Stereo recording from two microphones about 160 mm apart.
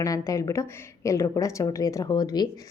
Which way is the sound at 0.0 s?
20° left (ahead or behind).